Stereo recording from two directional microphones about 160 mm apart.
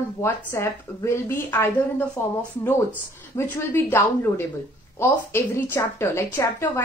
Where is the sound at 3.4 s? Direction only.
15° left (ahead or behind).